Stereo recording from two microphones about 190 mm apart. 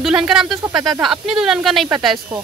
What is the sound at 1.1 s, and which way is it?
Speech, centre (ahead or behind).